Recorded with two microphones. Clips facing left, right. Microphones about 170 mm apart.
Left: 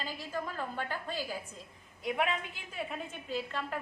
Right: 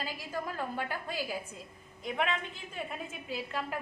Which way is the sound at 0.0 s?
10° right (ahead or behind).